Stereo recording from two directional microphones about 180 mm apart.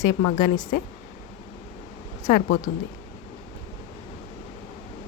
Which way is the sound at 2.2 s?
50° left (ahead or behind).